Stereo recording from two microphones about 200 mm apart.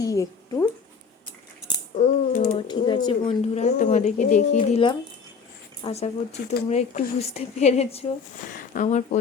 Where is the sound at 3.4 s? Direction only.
35° left (ahead or behind).